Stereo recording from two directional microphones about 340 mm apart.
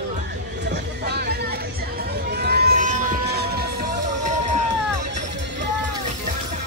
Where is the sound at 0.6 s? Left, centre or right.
Right.